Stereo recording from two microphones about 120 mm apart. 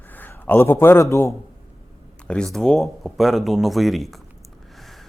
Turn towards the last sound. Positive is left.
turn(degrees=0)  # may be behind; listen again after turning